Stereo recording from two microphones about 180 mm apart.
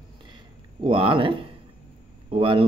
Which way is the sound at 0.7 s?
30° right (ahead or behind).